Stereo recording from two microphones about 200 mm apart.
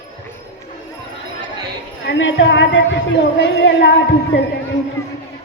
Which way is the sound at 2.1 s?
65° left (ahead or behind).